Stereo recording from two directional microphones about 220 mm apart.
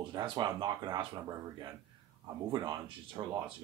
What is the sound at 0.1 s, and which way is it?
Speech, 20° right (ahead or behind).